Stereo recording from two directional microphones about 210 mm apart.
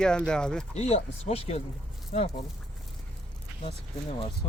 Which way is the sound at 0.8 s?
30° left (ahead or behind).